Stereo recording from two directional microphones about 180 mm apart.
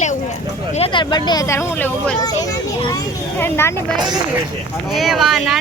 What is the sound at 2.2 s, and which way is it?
Speech, 20° left (ahead or behind).